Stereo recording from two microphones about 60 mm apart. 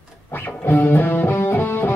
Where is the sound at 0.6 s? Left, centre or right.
Left.